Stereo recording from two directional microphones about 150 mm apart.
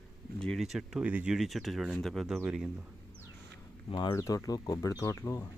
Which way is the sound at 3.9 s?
30° left (ahead or behind).